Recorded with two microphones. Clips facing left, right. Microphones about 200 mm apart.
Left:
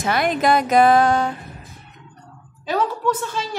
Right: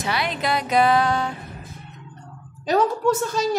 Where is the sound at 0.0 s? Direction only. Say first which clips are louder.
Left 6 dB; 50° left (ahead or behind).